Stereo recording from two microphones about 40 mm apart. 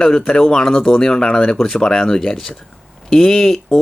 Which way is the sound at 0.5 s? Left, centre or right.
Centre.